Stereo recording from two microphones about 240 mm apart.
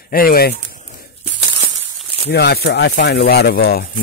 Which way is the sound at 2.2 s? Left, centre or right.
Left.